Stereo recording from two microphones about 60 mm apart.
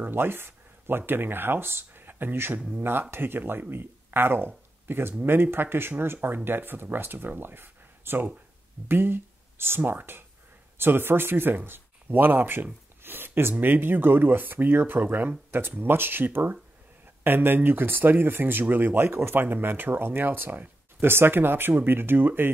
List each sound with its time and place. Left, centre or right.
0.0 s speech: right